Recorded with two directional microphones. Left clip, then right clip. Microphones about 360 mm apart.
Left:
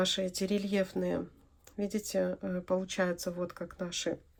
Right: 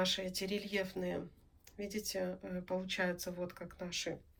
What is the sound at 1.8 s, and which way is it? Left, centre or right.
Speech, left.